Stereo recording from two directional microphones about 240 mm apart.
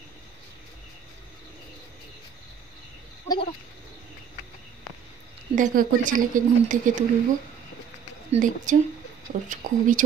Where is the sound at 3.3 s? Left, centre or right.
Centre.